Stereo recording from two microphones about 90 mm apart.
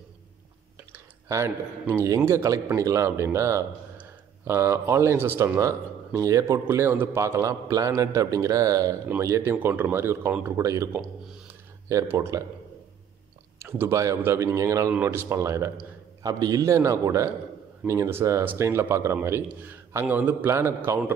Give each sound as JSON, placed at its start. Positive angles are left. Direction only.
{"t": 0.9, "sound": "a man's voice", "side_deg": -25}
{"t": 5.6, "sound": "a man's voice", "side_deg": -35}
{"t": 12.1, "sound": "a man's voice", "side_deg": -30}
{"t": 13.6, "sound": "a man's voice", "side_deg": -30}
{"t": 15.8, "sound": "a man's voice", "side_deg": -45}